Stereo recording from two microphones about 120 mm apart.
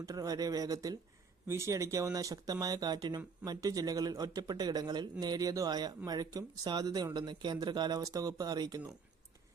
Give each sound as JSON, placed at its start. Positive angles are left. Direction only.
{"t": 0.0, "sound": "speech", "side_deg": -30}